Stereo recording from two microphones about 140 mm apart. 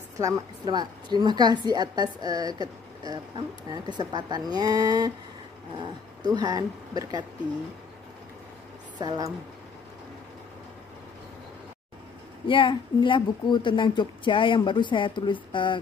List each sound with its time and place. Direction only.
0.2 s a woman's voice: 30° right (ahead or behind)
8.9 s speech: 30° right (ahead or behind)
12.4 s speech: 35° left (ahead or behind)